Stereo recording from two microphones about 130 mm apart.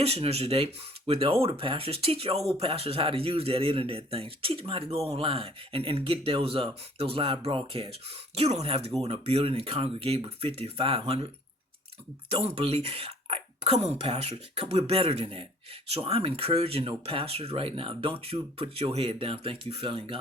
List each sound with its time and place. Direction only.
0.0 s speech: 50° right (ahead or behind)
12.3 s speech: 50° right (ahead or behind)